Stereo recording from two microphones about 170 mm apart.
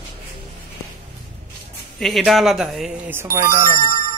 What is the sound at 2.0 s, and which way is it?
Speech, centre (ahead or behind).